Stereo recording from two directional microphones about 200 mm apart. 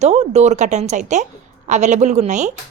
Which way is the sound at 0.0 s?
30° right (ahead or behind).